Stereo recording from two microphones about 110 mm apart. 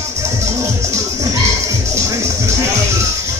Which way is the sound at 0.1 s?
25° right (ahead or behind).